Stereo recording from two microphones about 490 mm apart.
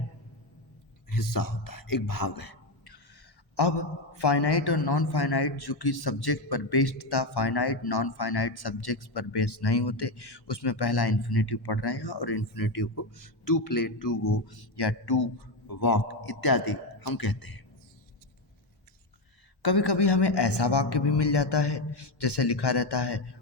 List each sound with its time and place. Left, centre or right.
1.1 s a man's voice: left
19.6 s a man's voice: left